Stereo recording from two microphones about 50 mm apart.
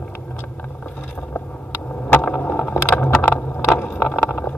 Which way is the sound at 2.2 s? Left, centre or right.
Left.